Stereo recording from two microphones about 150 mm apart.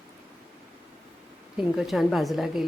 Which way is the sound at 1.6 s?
Centre (ahead or behind).